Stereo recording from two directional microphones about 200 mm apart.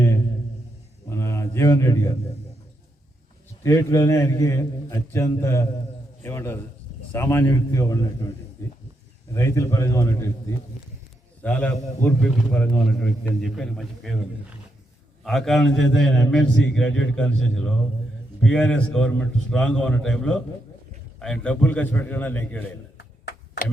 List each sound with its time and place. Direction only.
1.1 s a sound: 15° left (ahead or behind)
3.6 s a man's voice: 15° left (ahead or behind)
9.3 s a man's voice: 15° left (ahead or behind)
15.2 s a man's voice: centre (ahead or behind)